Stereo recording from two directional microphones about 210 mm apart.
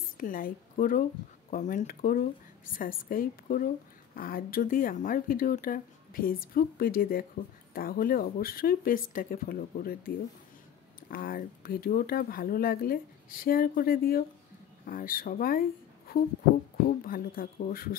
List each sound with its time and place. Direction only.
0.2 s a woman's voice: 40° left (ahead or behind)
17.0 s speech: 45° left (ahead or behind)